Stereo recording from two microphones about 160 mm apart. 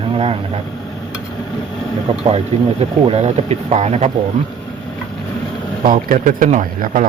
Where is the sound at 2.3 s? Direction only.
40° right (ahead or behind).